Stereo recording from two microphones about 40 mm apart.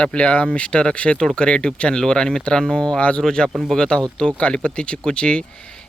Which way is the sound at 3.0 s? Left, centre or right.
Left.